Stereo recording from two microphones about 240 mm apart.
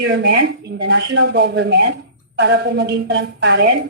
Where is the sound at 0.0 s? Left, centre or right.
Right.